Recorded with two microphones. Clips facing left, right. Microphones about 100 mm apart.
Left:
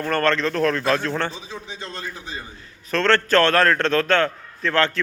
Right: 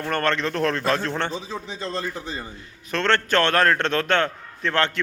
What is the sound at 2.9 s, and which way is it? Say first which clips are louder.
A man's voice: left 3 dB; 15° right (ahead or behind).